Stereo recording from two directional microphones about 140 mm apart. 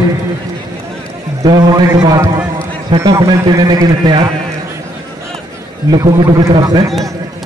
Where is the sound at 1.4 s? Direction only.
30° right (ahead or behind).